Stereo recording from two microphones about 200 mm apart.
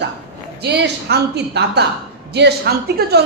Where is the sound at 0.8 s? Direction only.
55° right (ahead or behind).